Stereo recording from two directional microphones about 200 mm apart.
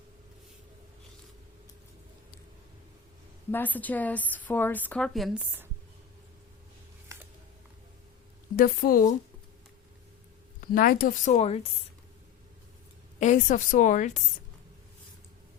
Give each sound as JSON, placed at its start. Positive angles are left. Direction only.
{"t": 3.5, "sound": "a woman's voice", "side_deg": 10}
{"t": 8.5, "sound": "speech", "side_deg": 45}
{"t": 10.6, "sound": "speech", "side_deg": 45}
{"t": 13.1, "sound": "a woman's voice", "side_deg": 35}